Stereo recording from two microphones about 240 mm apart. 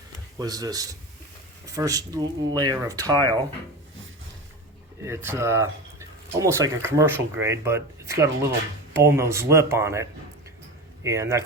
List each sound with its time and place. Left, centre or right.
0.3 s speech: centre
5.0 s speech: centre